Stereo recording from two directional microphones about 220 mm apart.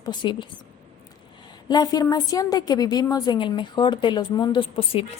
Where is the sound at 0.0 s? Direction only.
20° left (ahead or behind).